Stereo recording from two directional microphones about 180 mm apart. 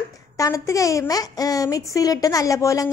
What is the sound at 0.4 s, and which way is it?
A woman's voice, 20° left (ahead or behind).